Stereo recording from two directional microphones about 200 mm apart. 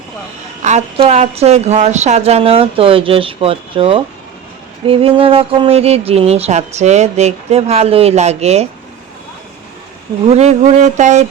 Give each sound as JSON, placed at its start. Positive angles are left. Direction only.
{"t": 0.6, "sound": "speech", "side_deg": -35}
{"t": 10.2, "sound": "speech", "side_deg": -35}